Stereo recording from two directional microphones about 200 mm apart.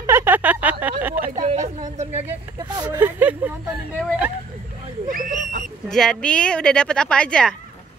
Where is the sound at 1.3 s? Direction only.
35° right (ahead or behind).